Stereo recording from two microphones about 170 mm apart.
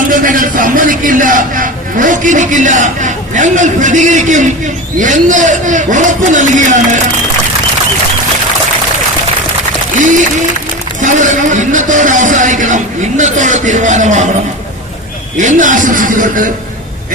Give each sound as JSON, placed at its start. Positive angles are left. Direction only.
{"t": 0.1, "sound": "a man's voice", "side_deg": -50}
{"t": 9.9, "sound": "speech", "side_deg": -50}
{"t": 15.4, "sound": "speech", "side_deg": -50}